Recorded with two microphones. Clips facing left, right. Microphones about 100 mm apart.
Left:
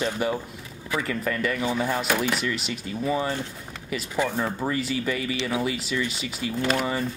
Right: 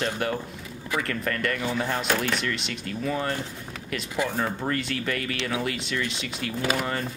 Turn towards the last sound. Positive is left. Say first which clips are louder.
# left 2 dB
turn(degrees=0)  # may be behind; listen again after turning